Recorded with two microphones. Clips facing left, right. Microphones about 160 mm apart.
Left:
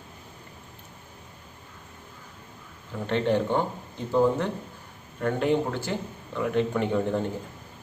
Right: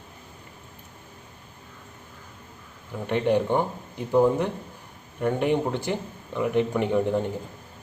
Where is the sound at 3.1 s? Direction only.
15° right (ahead or behind).